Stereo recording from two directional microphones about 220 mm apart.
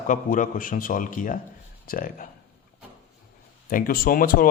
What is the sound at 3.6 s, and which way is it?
Speech, 40° left (ahead or behind).